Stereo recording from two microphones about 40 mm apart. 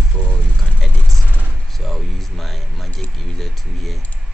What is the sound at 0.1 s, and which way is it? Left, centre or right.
Vehicle, left.